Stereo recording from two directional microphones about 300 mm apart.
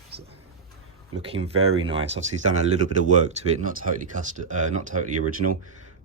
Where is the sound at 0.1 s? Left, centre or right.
Right.